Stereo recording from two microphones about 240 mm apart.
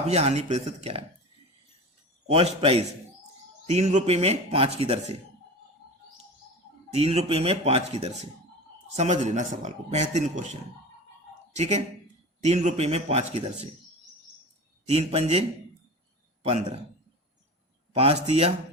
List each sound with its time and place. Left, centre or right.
0.0 s a man's voice: right
2.3 s a man's voice: right
6.9 s a man's voice: right
14.8 s a man's voice: right
17.9 s a man's voice: right